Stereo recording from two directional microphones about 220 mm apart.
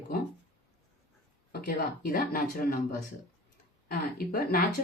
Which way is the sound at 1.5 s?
45° left (ahead or behind).